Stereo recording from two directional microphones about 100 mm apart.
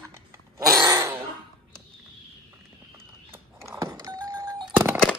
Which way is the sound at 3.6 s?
30° right (ahead or behind).